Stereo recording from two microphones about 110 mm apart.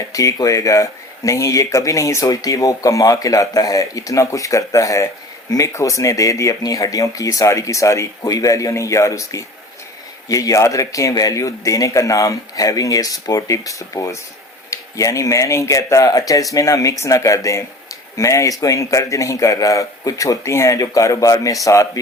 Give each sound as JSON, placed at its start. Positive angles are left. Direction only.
{"t": 0.1, "sound": "speech", "side_deg": 30}